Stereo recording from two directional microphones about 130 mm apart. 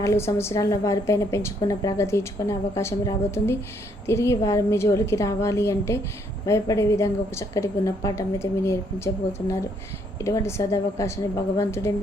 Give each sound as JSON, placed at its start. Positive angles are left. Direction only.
{"t": 0.0, "sound": "a woman's voice", "side_deg": 20}